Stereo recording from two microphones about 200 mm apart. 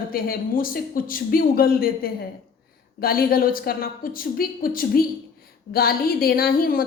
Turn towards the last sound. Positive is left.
turn(degrees=45)  # may be behind; listen again after turning